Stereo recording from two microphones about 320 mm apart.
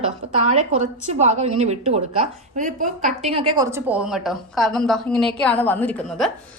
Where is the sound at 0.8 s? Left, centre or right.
Right; by 6.3 s centre.